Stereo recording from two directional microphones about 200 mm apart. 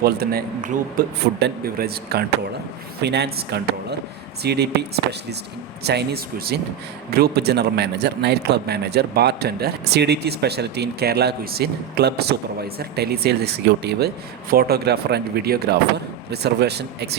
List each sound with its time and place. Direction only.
0.0 s speech: 50° right (ahead or behind)